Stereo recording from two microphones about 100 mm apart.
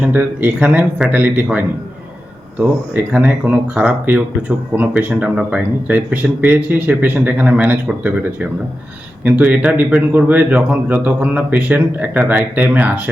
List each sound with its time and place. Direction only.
0.0 s speech: 20° right (ahead or behind)